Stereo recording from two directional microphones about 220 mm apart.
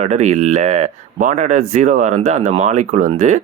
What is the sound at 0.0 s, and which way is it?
Speech, 30° right (ahead or behind).